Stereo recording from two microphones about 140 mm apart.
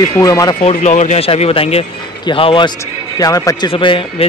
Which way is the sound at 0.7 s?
55° left (ahead or behind).